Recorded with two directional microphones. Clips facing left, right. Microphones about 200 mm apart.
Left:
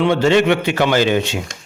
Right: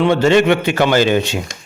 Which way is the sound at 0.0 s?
45° right (ahead or behind).